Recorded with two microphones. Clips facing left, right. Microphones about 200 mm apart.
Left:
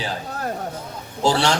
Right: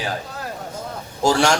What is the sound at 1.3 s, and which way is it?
Speech, 45° right (ahead or behind).